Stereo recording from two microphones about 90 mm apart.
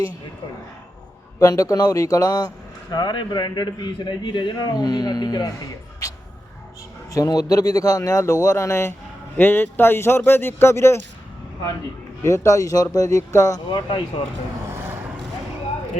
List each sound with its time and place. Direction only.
1.4 s speech: 40° left (ahead or behind)
2.9 s a man's voice: 55° left (ahead or behind)
7.1 s speech: 45° left (ahead or behind)
12.2 s speech: 30° left (ahead or behind)
13.7 s a man's voice: 55° left (ahead or behind)